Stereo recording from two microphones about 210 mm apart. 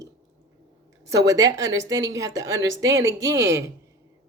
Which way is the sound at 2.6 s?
60° right (ahead or behind).